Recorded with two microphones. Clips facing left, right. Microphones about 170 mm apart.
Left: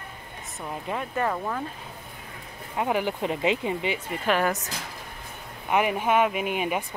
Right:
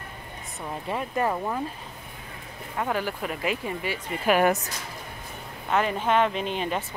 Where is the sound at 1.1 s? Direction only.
10° right (ahead or behind).